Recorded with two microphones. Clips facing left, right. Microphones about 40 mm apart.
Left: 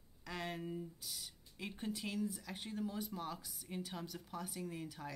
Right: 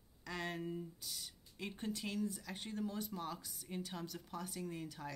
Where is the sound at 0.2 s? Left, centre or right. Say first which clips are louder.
Right 1 dB; centre.